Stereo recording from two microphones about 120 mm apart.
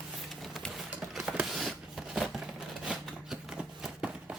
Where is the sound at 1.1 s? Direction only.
5° right (ahead or behind).